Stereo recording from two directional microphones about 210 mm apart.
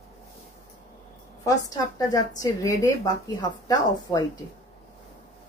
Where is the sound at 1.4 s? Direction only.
15° left (ahead or behind).